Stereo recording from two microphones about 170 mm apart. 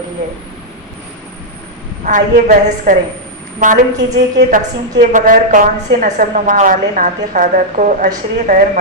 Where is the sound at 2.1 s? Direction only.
50° right (ahead or behind).